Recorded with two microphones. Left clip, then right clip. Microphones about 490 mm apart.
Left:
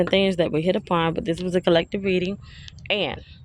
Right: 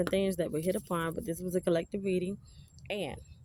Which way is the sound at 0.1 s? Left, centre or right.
Right.